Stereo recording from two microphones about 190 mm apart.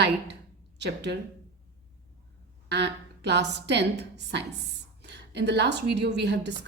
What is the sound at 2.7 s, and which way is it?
A woman's voice, 65° right (ahead or behind).